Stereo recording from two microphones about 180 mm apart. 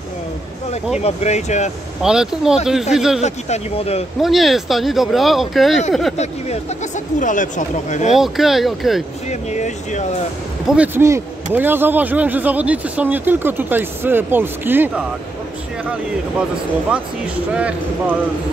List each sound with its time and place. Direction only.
0.9 s speech: 40° left (ahead or behind)
2.0 s speech: 5° right (ahead or behind)
3.2 s speech: 40° left (ahead or behind)
4.2 s speech: centre (ahead or behind)
7.2 s speech: 45° left (ahead or behind)
8.1 s speech: centre (ahead or behind)
9.3 s speech: 40° left (ahead or behind)
10.7 s speech: 10° right (ahead or behind)